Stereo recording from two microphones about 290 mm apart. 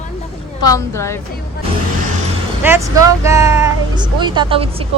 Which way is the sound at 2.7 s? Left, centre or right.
Centre.